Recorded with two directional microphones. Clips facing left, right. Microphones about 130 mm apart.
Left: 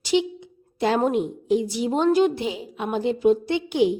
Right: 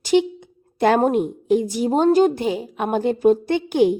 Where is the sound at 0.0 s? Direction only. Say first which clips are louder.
Right 4 dB; 50° right (ahead or behind).